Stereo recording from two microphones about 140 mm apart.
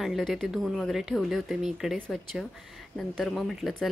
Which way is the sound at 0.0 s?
Centre (ahead or behind).